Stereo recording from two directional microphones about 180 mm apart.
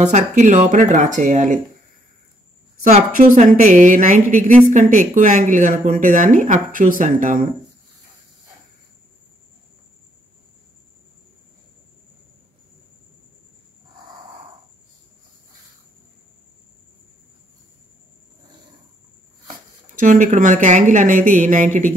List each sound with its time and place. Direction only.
0.0 s a woman's voice: 40° right (ahead or behind)
2.8 s a woman's voice: 40° right (ahead or behind)
20.0 s a woman's voice: 45° right (ahead or behind)